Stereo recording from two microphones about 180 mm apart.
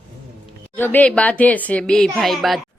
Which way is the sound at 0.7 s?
10° left (ahead or behind).